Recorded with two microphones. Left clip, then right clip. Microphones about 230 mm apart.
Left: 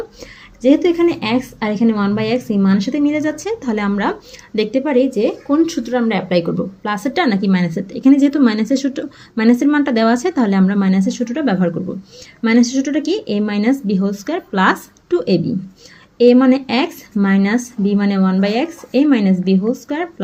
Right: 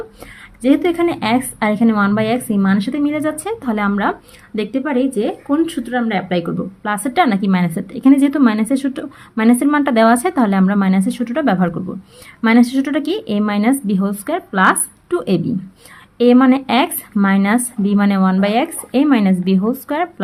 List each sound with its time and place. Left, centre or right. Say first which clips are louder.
0.6 s speech: left 2 dB; centre